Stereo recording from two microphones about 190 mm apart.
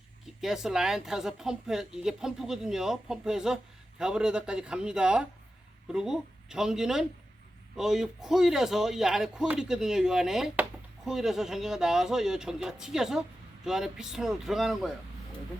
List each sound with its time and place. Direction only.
0.4 s a man's voice: 5° right (ahead or behind)